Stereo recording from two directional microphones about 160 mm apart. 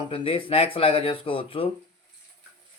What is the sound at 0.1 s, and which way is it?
Speech, 35° left (ahead or behind).